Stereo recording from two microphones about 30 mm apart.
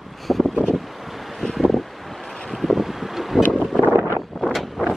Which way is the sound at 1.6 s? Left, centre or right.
Centre.